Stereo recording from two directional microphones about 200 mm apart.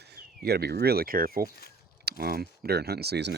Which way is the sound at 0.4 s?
55° right (ahead or behind).